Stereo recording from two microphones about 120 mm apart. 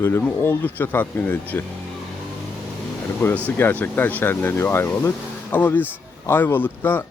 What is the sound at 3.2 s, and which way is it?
Speech, 20° left (ahead or behind).